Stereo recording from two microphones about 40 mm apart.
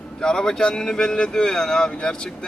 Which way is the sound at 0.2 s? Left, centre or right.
Centre.